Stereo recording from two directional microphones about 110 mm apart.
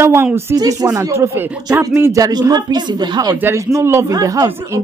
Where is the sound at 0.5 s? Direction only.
35° right (ahead or behind).